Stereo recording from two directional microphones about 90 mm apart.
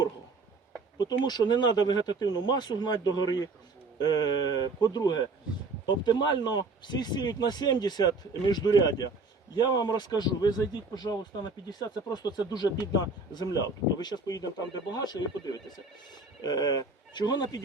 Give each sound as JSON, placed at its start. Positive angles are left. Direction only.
{"t": 0.9, "sound": "speech", "side_deg": 50}